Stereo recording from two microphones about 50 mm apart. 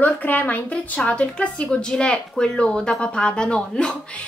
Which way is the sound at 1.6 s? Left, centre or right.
Centre.